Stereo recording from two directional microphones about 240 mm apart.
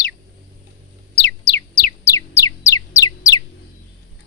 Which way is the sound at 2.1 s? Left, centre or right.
Centre.